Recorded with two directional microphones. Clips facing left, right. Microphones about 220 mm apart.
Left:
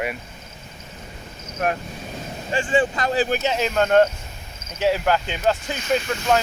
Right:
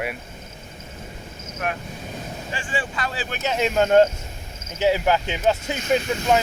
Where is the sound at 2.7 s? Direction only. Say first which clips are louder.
Left 8 dB; 40° left (ahead or behind).